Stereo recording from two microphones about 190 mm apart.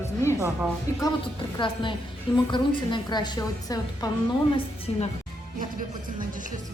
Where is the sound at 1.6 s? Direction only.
25° left (ahead or behind).